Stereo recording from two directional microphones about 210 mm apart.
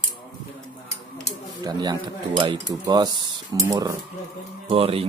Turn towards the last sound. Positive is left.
turn(degrees=-25)  # may be behind; listen again after turning